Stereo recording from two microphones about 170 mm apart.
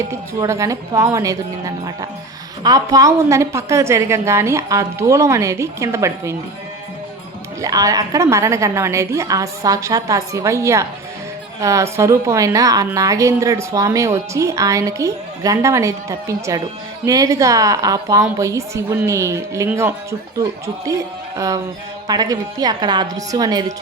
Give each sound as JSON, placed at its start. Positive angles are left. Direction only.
{"t": 0.1, "sound": "a woman's voice", "side_deg": -15}
{"t": 7.6, "sound": "a woman's voice", "side_deg": -20}